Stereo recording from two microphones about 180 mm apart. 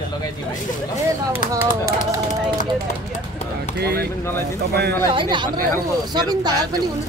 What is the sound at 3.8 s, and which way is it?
Speech, 60° right (ahead or behind).